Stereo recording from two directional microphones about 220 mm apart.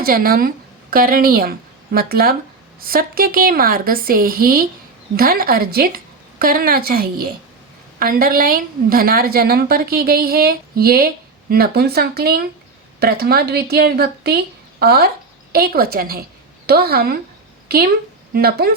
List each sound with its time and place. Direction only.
0.0 s a woman's voice: 40° right (ahead or behind)